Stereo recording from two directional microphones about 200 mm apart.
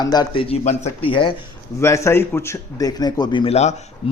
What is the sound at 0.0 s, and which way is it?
A man's voice, 20° left (ahead or behind).